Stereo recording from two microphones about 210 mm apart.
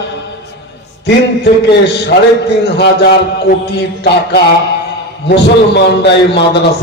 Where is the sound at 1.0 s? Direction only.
50° left (ahead or behind).